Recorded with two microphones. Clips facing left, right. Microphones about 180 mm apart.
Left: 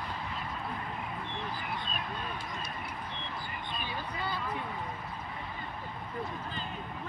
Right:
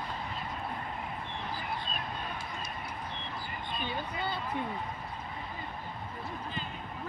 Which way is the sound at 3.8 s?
25° right (ahead or behind).